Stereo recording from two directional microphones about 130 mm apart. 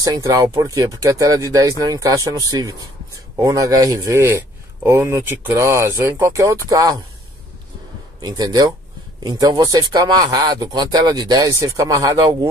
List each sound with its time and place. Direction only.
0.0 s a man's voice: 25° right (ahead or behind)
8.2 s a man's voice: 30° right (ahead or behind)